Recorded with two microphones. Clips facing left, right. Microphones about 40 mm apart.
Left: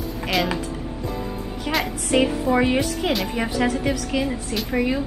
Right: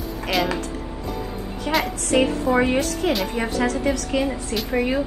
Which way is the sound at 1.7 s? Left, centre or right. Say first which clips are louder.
Right 2 dB; centre.